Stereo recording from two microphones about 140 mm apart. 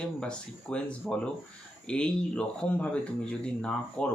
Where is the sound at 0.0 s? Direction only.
5° left (ahead or behind).